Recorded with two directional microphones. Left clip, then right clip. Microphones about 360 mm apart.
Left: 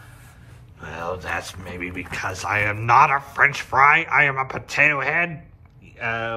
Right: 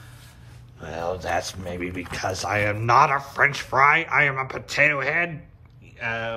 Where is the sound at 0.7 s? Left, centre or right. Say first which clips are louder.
Right 1 dB; centre.